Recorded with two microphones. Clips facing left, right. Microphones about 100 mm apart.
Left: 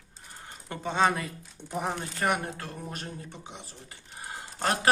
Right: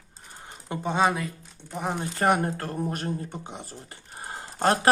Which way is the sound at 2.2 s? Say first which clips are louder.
Right 7 dB; 40° right (ahead or behind).